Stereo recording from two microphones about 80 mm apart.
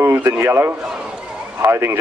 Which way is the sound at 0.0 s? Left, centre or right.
Right.